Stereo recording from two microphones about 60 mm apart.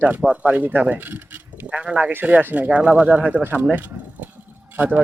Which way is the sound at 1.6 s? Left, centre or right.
Centre.